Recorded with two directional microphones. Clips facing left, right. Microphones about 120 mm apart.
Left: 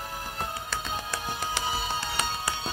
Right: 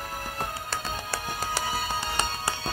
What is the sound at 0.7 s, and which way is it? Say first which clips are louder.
Music: even; 35° right (ahead or behind).